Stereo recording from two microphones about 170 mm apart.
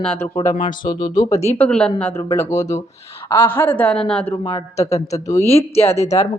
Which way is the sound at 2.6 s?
45° left (ahead or behind).